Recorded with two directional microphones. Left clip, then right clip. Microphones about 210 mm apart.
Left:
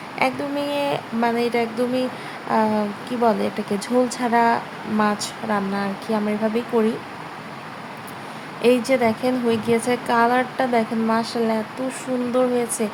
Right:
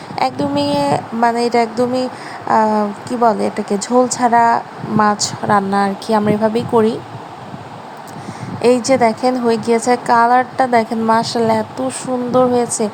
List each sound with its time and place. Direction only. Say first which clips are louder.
0.2 s speech: right 6 dB; 30° right (ahead or behind)
8.6 s speech: right 6 dB; 25° right (ahead or behind)